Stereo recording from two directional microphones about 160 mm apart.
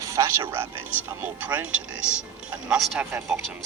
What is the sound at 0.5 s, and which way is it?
Speech, 15° right (ahead or behind).